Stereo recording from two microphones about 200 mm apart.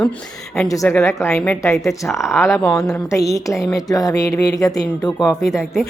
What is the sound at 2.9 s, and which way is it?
A woman's voice, 15° left (ahead or behind).